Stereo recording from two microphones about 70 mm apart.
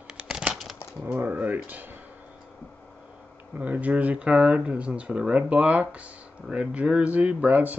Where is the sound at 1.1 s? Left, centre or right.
Right.